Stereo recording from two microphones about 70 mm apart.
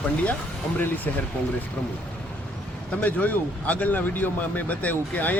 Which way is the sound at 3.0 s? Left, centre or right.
Left.